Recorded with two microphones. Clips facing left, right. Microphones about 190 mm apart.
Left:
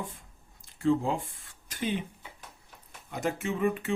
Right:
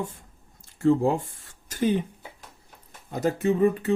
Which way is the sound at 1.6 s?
40° right (ahead or behind).